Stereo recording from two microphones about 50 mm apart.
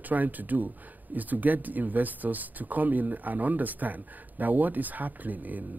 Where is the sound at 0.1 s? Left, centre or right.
Right.